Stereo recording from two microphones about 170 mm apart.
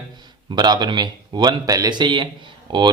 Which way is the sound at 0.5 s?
25° right (ahead or behind).